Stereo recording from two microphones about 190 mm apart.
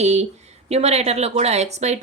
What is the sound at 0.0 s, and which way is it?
Speech, 35° right (ahead or behind).